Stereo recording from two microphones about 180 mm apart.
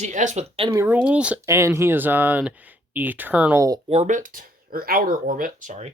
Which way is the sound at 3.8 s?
35° right (ahead or behind).